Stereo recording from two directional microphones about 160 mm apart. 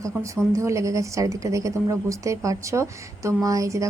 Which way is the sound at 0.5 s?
20° right (ahead or behind).